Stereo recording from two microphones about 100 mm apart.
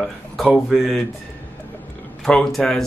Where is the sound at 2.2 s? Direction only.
5° left (ahead or behind).